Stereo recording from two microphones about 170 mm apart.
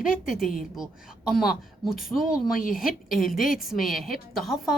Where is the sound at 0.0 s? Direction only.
5° right (ahead or behind).